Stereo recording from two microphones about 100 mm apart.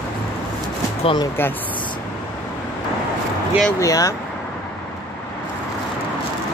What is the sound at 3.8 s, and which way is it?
Speech, 35° left (ahead or behind).